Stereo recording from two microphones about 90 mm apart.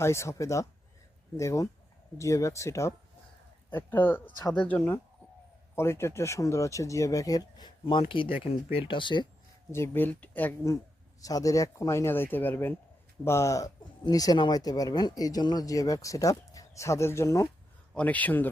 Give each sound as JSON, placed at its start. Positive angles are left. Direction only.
{"t": 0.0, "sound": "speech", "side_deg": 30}
{"t": 3.7, "sound": "speech", "side_deg": 20}
{"t": 5.7, "sound": "speech", "side_deg": 30}
{"t": 7.9, "sound": "speech", "side_deg": 65}
{"t": 8.4, "sound": "speech", "side_deg": 80}
{"t": 9.7, "sound": "speech", "side_deg": 25}
{"t": 11.2, "sound": "speech", "side_deg": 40}
{"t": 13.2, "sound": "speech", "side_deg": 30}
{"t": 17.9, "sound": "speech", "side_deg": 15}